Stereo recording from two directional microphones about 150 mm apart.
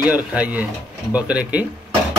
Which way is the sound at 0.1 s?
10° right (ahead or behind).